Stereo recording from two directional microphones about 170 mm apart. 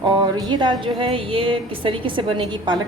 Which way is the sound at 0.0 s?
25° right (ahead or behind).